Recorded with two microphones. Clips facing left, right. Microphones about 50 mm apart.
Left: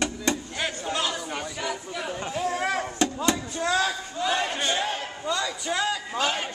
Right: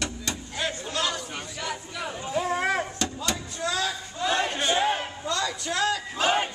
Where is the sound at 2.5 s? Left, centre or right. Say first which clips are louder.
Right 1 dB; centre.